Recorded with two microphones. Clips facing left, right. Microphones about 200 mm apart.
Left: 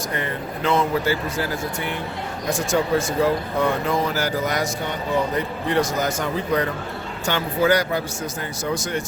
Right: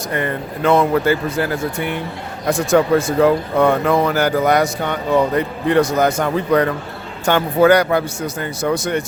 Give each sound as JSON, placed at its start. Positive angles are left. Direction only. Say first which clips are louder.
{"t": 0.2, "sound": "speech", "louder": "right 9 dB", "side_deg": -55}
{"t": 2.5, "sound": "speech", "louder": "right 7 dB", "side_deg": -55}